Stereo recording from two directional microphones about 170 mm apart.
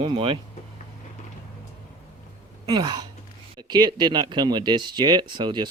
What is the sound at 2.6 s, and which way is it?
Speech, 25° right (ahead or behind).